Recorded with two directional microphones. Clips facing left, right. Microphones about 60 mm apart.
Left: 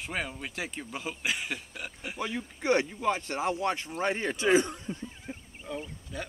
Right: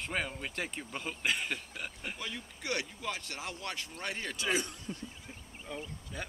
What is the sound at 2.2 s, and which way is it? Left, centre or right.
Speech, left.